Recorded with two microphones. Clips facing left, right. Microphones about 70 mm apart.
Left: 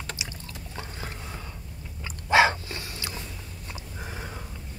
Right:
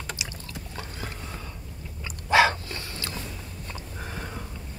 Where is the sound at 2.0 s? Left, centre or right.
Left.